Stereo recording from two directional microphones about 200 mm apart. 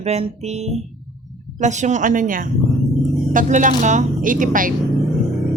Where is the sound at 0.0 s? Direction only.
35° right (ahead or behind).